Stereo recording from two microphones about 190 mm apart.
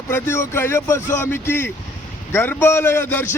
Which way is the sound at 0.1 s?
10° left (ahead or behind).